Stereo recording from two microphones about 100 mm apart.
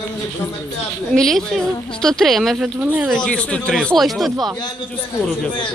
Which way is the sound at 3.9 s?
Centre (ahead or behind).